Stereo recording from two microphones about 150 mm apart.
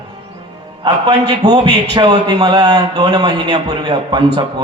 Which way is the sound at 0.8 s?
30° right (ahead or behind).